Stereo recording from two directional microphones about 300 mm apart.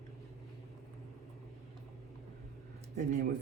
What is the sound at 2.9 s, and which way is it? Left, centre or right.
Speech, right.